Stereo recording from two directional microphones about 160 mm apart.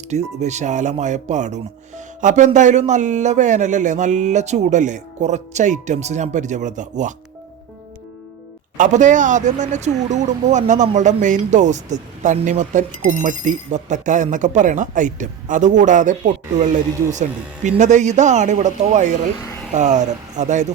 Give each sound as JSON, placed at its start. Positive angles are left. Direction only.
{"t": 0.1, "sound": "a man's voice", "side_deg": -45}
{"t": 8.8, "sound": "a man's voice", "side_deg": -50}